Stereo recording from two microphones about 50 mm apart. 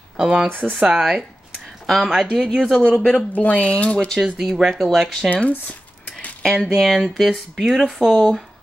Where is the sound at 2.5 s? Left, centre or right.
Centre.